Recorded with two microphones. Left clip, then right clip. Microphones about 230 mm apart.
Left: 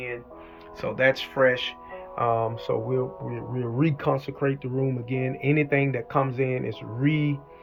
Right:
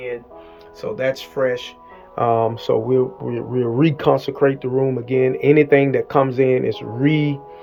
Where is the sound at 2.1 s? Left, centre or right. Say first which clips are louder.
Right 7 dB; right.